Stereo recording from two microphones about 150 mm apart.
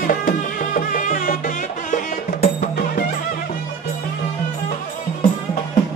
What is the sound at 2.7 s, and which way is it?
Music, 90° left.